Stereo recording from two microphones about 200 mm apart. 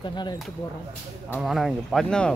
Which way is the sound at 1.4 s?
Centre (ahead or behind).